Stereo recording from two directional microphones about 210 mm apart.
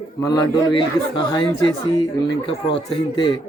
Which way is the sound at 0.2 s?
15° left (ahead or behind).